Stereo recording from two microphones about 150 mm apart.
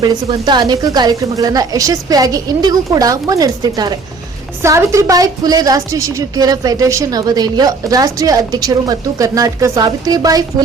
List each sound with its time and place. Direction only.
0.0 s a woman's voice: 30° right (ahead or behind)